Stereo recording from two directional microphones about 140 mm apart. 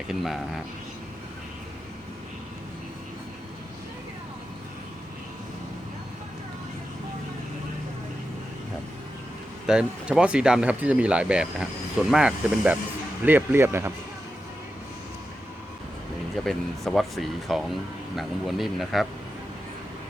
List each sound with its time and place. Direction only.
0.1 s speech: centre (ahead or behind)
9.6 s speech: 5° right (ahead or behind)
16.4 s speech: centre (ahead or behind)